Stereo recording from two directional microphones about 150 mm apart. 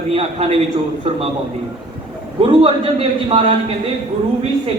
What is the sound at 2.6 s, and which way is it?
Speech, 35° right (ahead or behind).